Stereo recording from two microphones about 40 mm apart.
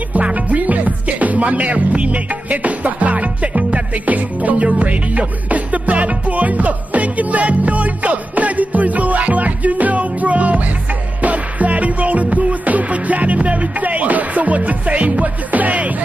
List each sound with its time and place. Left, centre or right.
0.2 s music: right